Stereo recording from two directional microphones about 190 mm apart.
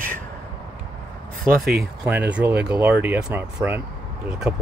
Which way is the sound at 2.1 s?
5° right (ahead or behind).